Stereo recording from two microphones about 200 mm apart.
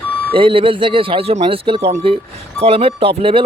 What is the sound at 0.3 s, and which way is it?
Speech, 25° right (ahead or behind).